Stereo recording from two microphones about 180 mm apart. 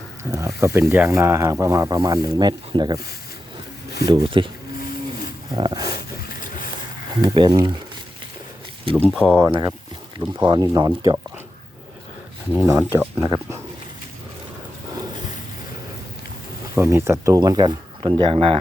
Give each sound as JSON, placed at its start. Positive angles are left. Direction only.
{"t": 0.3, "sound": "speech", "side_deg": -15}
{"t": 4.0, "sound": "speech", "side_deg": -25}
{"t": 5.5, "sound": "speech", "side_deg": -25}
{"t": 6.2, "sound": "a sound", "side_deg": 50}
{"t": 7.3, "sound": "speech", "side_deg": -20}
{"t": 9.0, "sound": "speech", "side_deg": 5}
{"t": 9.5, "sound": "speech", "side_deg": -25}
{"t": 12.5, "sound": "speech", "side_deg": -15}
{"t": 16.7, "sound": "speech", "side_deg": -15}